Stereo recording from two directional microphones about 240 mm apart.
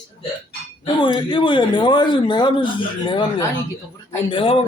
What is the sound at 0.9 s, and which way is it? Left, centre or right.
Speech, centre.